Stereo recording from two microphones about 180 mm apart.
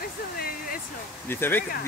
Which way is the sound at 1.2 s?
10° left (ahead or behind).